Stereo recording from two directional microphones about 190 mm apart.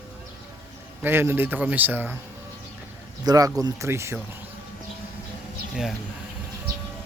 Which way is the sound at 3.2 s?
20° right (ahead or behind).